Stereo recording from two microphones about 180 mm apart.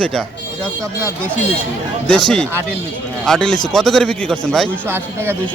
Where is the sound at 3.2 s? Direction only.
5° left (ahead or behind).